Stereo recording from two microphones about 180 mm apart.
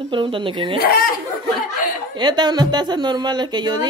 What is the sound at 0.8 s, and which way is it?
Speech, 55° left (ahead or behind).